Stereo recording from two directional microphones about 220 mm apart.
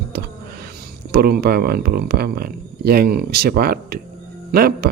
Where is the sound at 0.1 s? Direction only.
45° right (ahead or behind).